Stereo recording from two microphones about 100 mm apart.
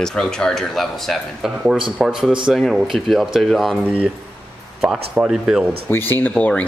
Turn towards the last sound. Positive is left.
turn(degrees=15)  # may be behind; listen again after turning